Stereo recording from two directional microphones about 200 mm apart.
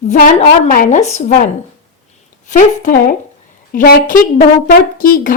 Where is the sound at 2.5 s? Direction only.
40° left (ahead or behind).